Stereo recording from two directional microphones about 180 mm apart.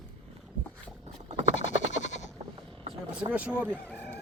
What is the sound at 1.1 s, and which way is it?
Clip-clop, 35° right (ahead or behind).